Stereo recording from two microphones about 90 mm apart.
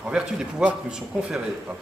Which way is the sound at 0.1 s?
10° right (ahead or behind).